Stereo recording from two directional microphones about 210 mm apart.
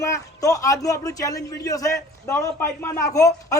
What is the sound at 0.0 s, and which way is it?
A man's voice, 15° left (ahead or behind).